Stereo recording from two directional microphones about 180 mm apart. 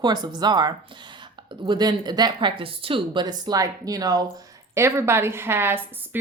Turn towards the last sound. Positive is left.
turn(degrees=-10)  # may be behind; listen again after turning